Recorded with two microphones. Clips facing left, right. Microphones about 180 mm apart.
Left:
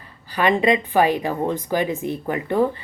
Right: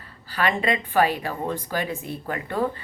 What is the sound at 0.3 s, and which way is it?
Speech, 15° left (ahead or behind).